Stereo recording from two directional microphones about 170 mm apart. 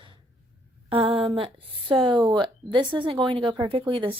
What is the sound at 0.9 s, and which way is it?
A woman's voice, 35° right (ahead or behind).